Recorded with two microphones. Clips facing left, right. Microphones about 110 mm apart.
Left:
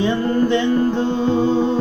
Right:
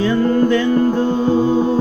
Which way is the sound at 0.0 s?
20° left (ahead or behind).